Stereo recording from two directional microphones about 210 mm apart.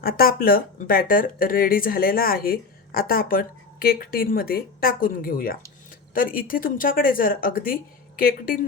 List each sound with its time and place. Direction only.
0.0 s speech: 45° left (ahead or behind)